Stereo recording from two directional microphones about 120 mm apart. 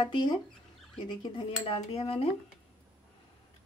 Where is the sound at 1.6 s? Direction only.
55° left (ahead or behind).